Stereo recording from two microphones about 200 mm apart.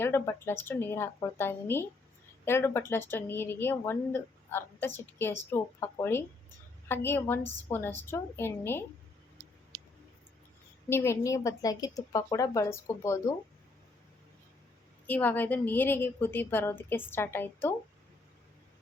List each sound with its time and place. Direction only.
0.0 s a woman's voice: 10° left (ahead or behind)
10.8 s a woman's voice: 10° left (ahead or behind)
15.0 s a woman's voice: 10° left (ahead or behind)